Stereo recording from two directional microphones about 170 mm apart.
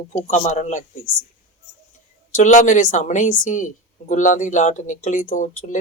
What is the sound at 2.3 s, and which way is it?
Speech, 45° left (ahead or behind).